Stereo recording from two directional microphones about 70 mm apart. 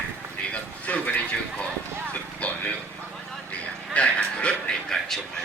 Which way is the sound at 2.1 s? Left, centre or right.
Left.